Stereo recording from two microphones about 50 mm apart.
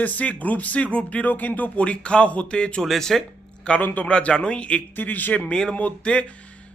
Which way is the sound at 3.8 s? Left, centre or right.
Left.